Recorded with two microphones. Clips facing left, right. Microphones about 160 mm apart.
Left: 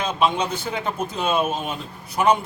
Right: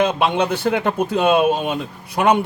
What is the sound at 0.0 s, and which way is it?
Speech, 65° right (ahead or behind).